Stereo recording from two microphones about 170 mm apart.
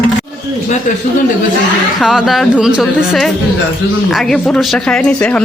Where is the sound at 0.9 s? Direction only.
50° left (ahead or behind).